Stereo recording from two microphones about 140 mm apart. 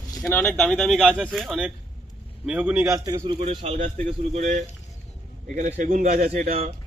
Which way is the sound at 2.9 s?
25° right (ahead or behind).